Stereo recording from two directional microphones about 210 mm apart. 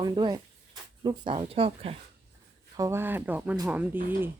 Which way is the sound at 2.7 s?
15° right (ahead or behind).